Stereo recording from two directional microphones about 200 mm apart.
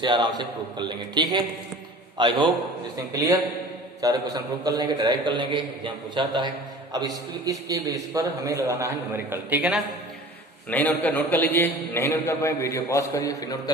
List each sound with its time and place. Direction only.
0.0 s a man's voice: 20° right (ahead or behind)
10.7 s a man's voice: 10° left (ahead or behind)